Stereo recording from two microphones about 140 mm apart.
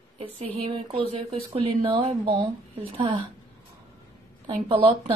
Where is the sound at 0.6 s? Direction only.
40° right (ahead or behind).